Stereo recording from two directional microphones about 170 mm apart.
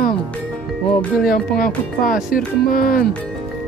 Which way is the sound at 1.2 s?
60° left (ahead or behind).